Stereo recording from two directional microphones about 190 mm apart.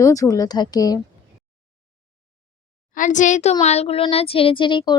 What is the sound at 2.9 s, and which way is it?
A child's voice, 40° left (ahead or behind).